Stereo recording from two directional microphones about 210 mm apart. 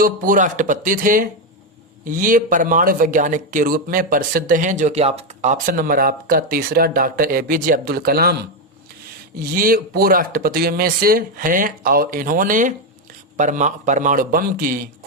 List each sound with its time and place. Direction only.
0.0 s speech: 40° right (ahead or behind)
9.4 s speech: 45° right (ahead or behind)